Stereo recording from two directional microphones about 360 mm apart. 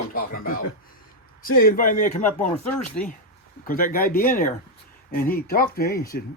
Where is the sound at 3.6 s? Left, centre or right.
Left.